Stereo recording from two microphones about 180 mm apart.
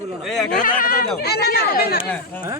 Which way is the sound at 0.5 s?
50° left (ahead or behind).